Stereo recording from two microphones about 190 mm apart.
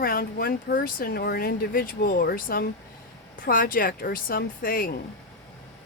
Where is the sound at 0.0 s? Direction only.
50° left (ahead or behind).